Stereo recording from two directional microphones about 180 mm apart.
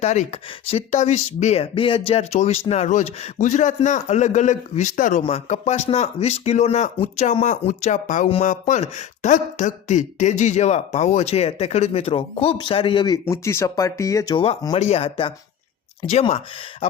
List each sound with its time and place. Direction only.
0.0 s speech: 40° left (ahead or behind)
13.2 s speech: 15° left (ahead or behind)
14.8 s speech: 35° left (ahead or behind)